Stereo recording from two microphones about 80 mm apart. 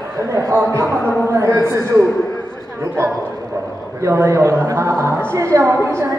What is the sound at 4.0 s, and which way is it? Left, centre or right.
A woman's voice, right.